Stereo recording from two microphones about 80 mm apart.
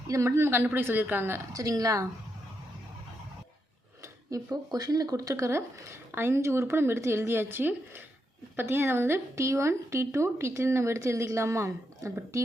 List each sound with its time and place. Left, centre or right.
0.1 s a woman's voice: right
1.5 s speech: right
4.3 s speech: right